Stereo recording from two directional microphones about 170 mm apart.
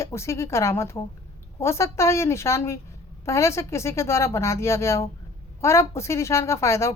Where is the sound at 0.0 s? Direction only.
15° left (ahead or behind).